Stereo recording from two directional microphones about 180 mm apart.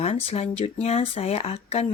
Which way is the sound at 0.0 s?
30° left (ahead or behind).